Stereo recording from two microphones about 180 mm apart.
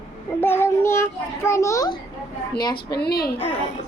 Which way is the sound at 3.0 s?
60° left (ahead or behind).